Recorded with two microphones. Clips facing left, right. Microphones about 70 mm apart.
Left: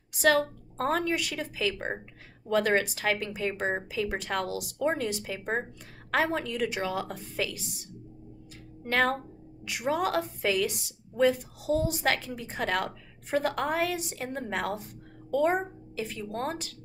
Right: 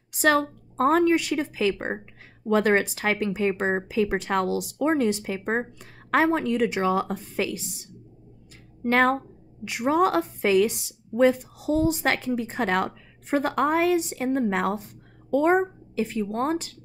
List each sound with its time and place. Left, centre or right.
0.2 s a woman's voice: right
9.7 s a woman's voice: right